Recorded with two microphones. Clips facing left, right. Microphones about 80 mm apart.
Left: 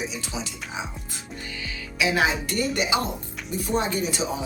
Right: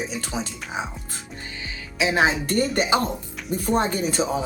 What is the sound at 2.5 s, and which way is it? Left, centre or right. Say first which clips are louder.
A woman's voice: right 4 dB; right.